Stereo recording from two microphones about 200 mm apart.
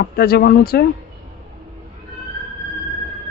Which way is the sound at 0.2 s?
50° left (ahead or behind).